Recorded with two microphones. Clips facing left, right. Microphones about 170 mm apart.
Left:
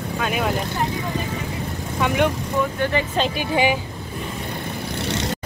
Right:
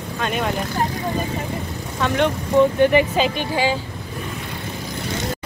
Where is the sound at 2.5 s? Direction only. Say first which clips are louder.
Right 9 dB; 25° right (ahead or behind).